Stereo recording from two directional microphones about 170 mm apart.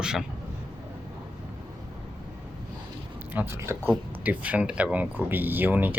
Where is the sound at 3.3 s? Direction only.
15° right (ahead or behind).